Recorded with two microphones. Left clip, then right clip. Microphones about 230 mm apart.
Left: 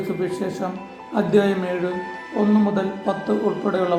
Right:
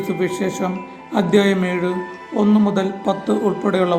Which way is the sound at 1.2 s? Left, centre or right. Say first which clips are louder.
Right 2 dB; right.